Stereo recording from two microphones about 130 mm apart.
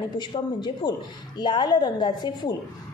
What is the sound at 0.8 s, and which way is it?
A woman's voice, 35° left (ahead or behind).